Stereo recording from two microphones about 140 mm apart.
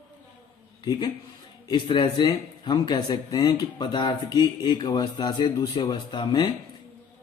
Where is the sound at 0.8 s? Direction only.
30° left (ahead or behind).